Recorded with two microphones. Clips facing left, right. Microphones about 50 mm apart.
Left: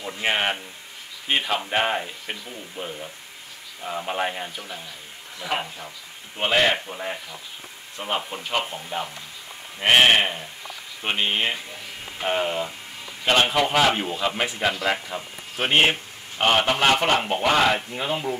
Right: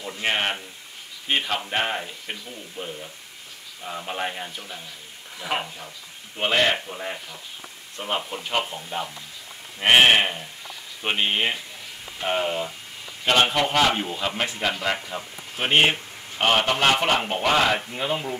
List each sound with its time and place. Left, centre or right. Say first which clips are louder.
0.0 s speech: left 1 dB; centre
5.4 s a man's voice: even; centre